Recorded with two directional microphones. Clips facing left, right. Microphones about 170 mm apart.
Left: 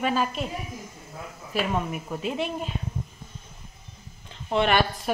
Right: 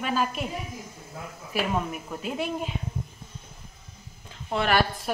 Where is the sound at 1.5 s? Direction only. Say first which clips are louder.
Left 1 dB; 10° right (ahead or behind).